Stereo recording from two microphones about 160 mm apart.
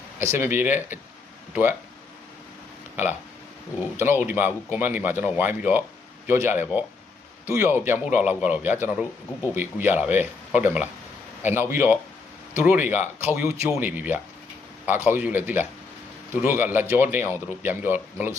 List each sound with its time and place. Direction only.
0.2 s speech: 15° right (ahead or behind)
2.9 s speech: 10° right (ahead or behind)